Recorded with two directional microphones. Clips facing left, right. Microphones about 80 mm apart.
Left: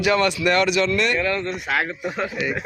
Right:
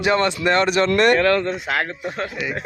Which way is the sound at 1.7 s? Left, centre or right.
Centre.